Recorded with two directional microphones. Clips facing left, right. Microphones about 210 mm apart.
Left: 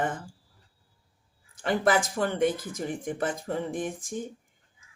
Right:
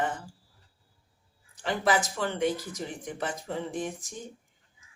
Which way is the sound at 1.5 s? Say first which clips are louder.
Left 3 dB; 50° left (ahead or behind).